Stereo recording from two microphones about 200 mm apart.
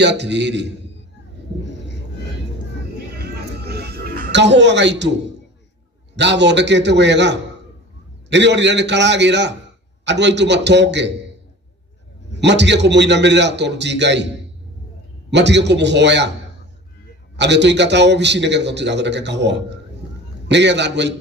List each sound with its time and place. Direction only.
0.0 s a man's voice: 60° right (ahead or behind)
3.2 s music: 50° right (ahead or behind)
6.1 s a man's voice: 60° right (ahead or behind)
12.4 s a man's voice: 60° right (ahead or behind)
15.3 s a man's voice: 60° right (ahead or behind)
17.4 s a man's voice: 60° right (ahead or behind)